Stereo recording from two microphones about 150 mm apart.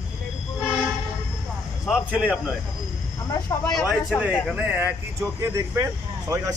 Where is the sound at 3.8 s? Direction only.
10° right (ahead or behind).